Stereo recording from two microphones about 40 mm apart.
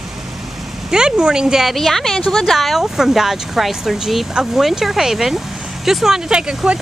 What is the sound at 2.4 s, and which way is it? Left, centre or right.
Speech, centre.